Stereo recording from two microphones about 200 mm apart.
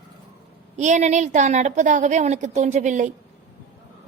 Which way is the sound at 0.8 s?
35° right (ahead or behind).